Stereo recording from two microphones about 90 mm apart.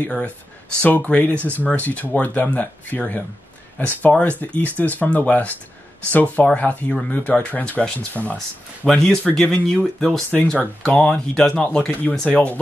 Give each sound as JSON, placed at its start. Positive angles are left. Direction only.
{"t": 0.0, "sound": "speech", "side_deg": 15}